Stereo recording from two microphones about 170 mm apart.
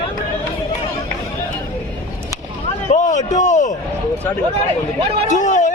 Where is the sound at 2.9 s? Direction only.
45° left (ahead or behind).